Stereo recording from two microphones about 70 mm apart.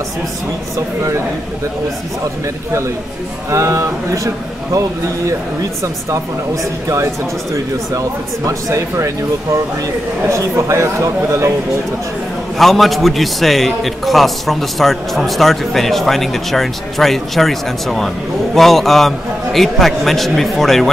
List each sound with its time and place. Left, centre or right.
3.4 s speech: right
8.5 s speech: right
10.2 s speech: right
12.5 s a man's voice: centre